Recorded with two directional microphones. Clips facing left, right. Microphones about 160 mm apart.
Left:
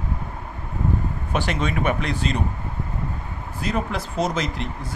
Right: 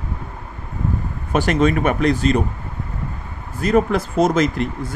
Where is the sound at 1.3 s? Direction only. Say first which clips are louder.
Right 8 dB; 45° right (ahead or behind).